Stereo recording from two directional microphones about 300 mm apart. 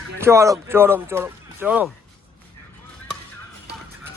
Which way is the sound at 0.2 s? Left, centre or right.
Centre.